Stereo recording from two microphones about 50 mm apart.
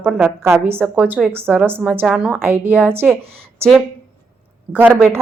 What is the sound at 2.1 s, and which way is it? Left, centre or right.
Speech, right.